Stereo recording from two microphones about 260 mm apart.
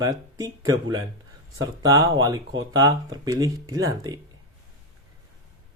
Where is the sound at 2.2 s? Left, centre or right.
Centre.